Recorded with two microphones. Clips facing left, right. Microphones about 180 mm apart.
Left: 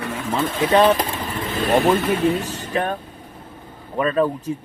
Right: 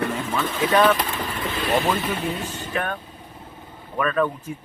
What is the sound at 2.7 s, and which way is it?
Speech, 30° left (ahead or behind).